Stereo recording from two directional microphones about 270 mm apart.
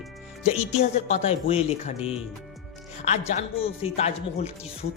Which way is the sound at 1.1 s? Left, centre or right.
Left.